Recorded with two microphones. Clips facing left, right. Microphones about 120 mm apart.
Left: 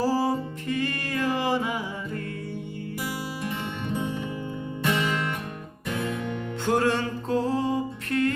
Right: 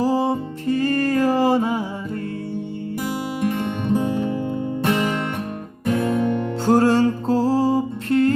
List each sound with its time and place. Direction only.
0.0 s music: 20° right (ahead or behind)
0.7 s music: 35° right (ahead or behind)
3.5 s music: 45° right (ahead or behind)